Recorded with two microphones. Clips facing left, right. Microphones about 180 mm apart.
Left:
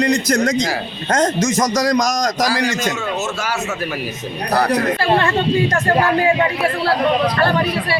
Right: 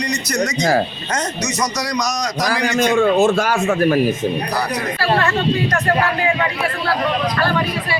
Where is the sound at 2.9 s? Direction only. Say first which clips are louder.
Right 9 dB; 55° right (ahead or behind).